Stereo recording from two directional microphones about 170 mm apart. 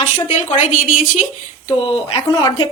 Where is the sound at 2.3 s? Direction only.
20° left (ahead or behind).